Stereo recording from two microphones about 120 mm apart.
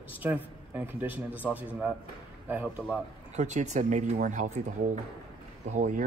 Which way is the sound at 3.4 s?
75° right (ahead or behind).